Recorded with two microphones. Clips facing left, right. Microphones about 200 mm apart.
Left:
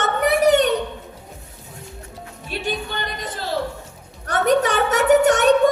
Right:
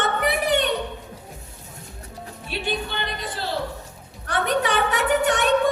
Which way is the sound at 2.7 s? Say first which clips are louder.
Left 1 dB; 45° left (ahead or behind).